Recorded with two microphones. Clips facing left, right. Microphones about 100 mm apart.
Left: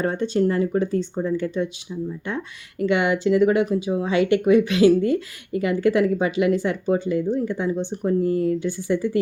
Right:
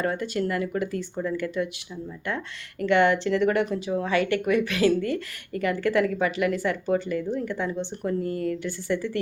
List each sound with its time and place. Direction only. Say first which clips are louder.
0.0 s speech: left 5 dB; 25° left (ahead or behind)